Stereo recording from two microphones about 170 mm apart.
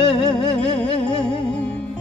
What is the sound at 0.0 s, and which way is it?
Music, 30° left (ahead or behind).